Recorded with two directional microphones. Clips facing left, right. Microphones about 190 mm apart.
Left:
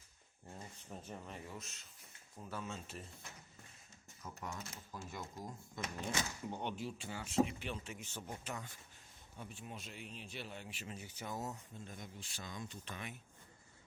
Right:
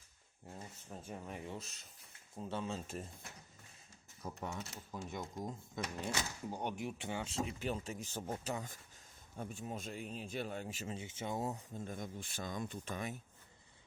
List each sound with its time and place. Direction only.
0.4 s speech: 5° right (ahead or behind)
1.5 s speech: 30° right (ahead or behind)
4.2 s speech: 30° right (ahead or behind)
6.5 s speech: 10° right (ahead or behind)
7.6 s speech: 40° right (ahead or behind)
10.8 s speech: 25° right (ahead or behind)
11.9 s speech: 50° right (ahead or behind)